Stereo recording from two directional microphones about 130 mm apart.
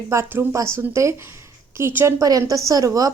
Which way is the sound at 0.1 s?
20° right (ahead or behind).